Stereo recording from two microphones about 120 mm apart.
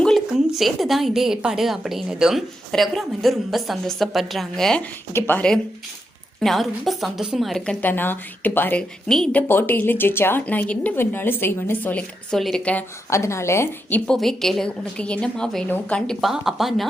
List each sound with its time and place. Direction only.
0.3 s a woman's voice: 5° right (ahead or behind)
5.1 s a woman's voice: 15° left (ahead or behind)
6.4 s a woman's voice: centre (ahead or behind); by 8.8 s 15° left (ahead or behind)
9.0 s a woman's voice: 5° left (ahead or behind)
9.5 s a woman's voice: 15° left (ahead or behind)
13.1 s a woman's voice: 25° left (ahead or behind)
14.1 s a woman's voice: 5° left (ahead or behind)